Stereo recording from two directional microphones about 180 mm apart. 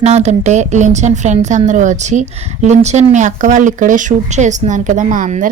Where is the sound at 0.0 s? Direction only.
40° right (ahead or behind).